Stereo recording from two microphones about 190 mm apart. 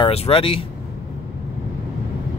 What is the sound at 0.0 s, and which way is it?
Speech, 30° left (ahead or behind).